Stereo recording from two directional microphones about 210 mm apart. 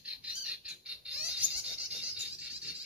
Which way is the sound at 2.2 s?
5° right (ahead or behind).